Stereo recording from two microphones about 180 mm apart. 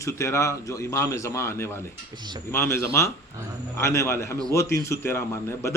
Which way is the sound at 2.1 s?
25° right (ahead or behind).